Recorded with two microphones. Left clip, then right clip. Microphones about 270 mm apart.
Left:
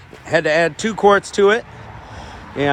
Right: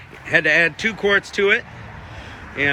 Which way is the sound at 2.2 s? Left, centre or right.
Centre.